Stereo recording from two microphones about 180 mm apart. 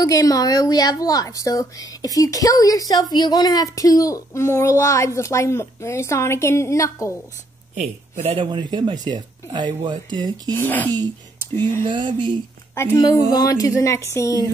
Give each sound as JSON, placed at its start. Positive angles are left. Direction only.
{"t": 0.0, "sound": "a woman's voice", "side_deg": 20}
{"t": 7.7, "sound": "speech", "side_deg": -40}
{"t": 10.5, "sound": "speech", "side_deg": 10}
{"t": 11.8, "sound": "speech", "side_deg": -25}
{"t": 12.7, "sound": "a woman's voice", "side_deg": 15}